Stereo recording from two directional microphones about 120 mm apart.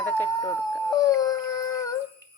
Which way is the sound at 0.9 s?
30° left (ahead or behind).